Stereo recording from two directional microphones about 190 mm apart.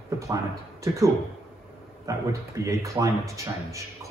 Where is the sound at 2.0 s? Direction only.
15° right (ahead or behind).